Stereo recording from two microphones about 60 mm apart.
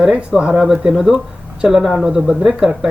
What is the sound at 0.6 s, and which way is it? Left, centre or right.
Speech, centre.